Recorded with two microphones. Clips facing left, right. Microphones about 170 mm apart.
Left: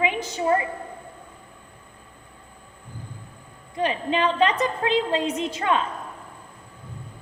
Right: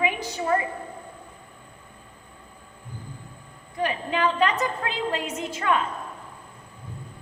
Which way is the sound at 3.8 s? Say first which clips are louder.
Left 2 dB; 25° left (ahead or behind).